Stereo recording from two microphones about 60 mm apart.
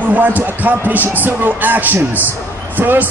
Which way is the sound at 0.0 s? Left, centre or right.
Right.